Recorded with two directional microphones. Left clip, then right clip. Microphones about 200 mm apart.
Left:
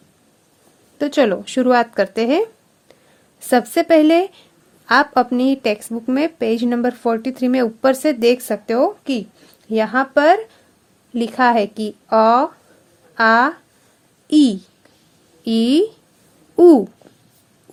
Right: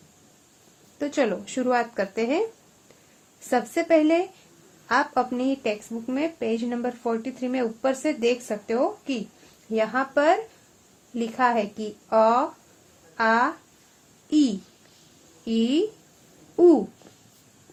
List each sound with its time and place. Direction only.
0.9 s speech: 50° left (ahead or behind)
3.5 s a child's voice: 50° left (ahead or behind)